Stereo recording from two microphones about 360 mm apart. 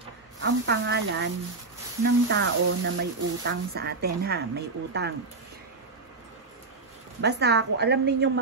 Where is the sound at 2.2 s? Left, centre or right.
Right.